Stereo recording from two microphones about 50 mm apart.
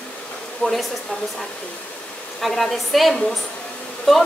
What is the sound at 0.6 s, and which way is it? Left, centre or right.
Speech, left.